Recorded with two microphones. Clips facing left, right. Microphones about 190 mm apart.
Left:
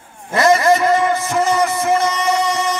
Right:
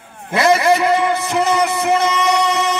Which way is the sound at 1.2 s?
65° right (ahead or behind).